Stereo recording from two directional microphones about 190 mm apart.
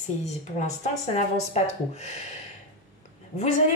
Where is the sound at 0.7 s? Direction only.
35° left (ahead or behind).